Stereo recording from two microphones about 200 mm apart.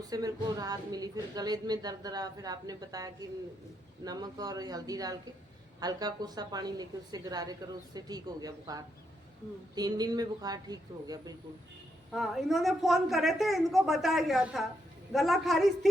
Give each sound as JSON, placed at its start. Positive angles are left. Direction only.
{"t": 0.1, "sound": "a woman's voice", "side_deg": -20}
{"t": 12.1, "sound": "a woman's voice", "side_deg": 0}